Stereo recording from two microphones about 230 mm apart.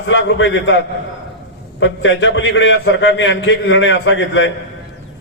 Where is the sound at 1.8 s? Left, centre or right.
Left.